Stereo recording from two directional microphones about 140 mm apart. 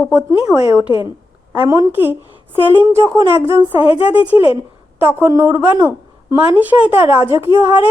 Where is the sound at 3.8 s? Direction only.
40° left (ahead or behind).